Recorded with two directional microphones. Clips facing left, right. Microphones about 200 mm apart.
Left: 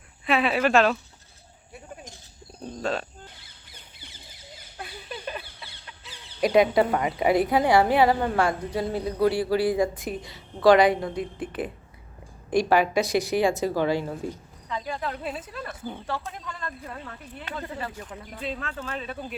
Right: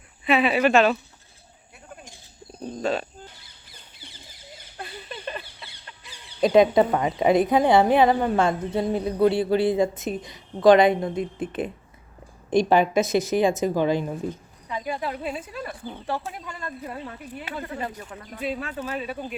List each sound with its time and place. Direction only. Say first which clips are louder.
0.3 s speech: right 3 dB; centre (ahead or behind)
2.6 s speech: right 3 dB; 5° right (ahead or behind)
4.8 s a sound: right 1 dB; 5° left (ahead or behind)
6.4 s a woman's voice: right 3 dB; 25° right (ahead or behind)